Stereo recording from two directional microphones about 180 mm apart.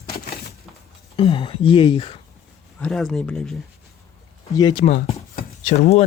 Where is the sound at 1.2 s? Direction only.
30° left (ahead or behind).